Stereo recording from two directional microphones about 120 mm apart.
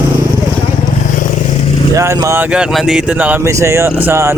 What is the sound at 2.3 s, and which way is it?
Speech, 10° right (ahead or behind).